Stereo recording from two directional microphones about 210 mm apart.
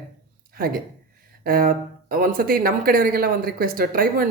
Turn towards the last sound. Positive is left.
turn(degrees=-45)  # may be behind; listen again after turning